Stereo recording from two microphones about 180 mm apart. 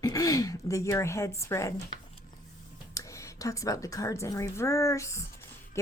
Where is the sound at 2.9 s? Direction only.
15° left (ahead or behind).